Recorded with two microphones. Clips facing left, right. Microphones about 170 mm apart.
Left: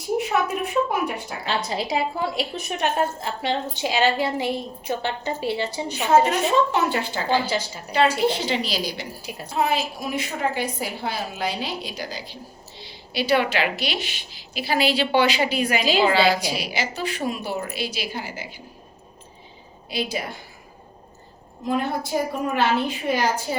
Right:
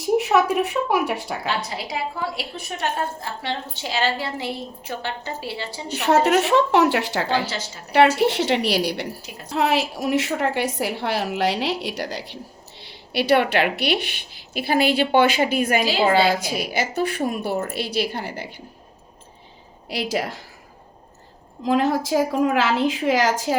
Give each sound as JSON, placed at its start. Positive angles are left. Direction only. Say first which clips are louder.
{"t": 0.2, "sound": "a woman's voice", "louder": "right 4 dB", "side_deg": -85}
{"t": 1.5, "sound": "a woman's voice", "louder": "left 4 dB", "side_deg": 25}
{"t": 5.9, "sound": "a woman's voice", "louder": "right 2 dB", "side_deg": -70}
{"t": 9.6, "sound": "a woman's voice", "louder": "right 3 dB", "side_deg": -80}
{"t": 19.9, "sound": "a woman's voice", "louder": "right 3 dB", "side_deg": -80}
{"t": 21.6, "sound": "a woman's voice", "louder": "right 5 dB", "side_deg": -90}